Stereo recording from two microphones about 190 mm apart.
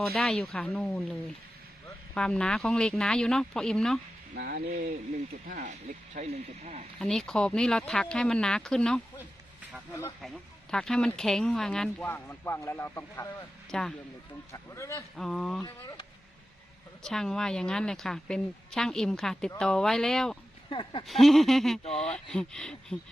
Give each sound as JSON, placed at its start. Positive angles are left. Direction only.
{"t": 0.1, "sound": "speech", "side_deg": 0}
{"t": 2.1, "sound": "speech", "side_deg": 5}
{"t": 4.4, "sound": "speech", "side_deg": -55}
{"t": 6.1, "sound": "speech", "side_deg": -35}
{"t": 7.0, "sound": "a man's voice", "side_deg": 0}
{"t": 14.5, "sound": "a man's voice", "side_deg": 15}
{"t": 15.1, "sound": "speech", "side_deg": 0}
{"t": 15.6, "sound": "speech", "side_deg": 20}
{"t": 17.0, "sound": "speech", "side_deg": 5}
{"t": 20.7, "sound": "speech", "side_deg": 25}
{"t": 21.1, "sound": "speech", "side_deg": 0}